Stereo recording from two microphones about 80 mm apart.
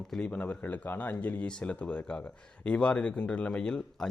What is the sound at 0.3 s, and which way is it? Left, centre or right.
Speech, centre.